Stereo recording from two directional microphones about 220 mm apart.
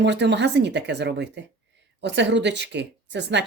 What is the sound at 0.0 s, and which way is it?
Speech, 50° right (ahead or behind).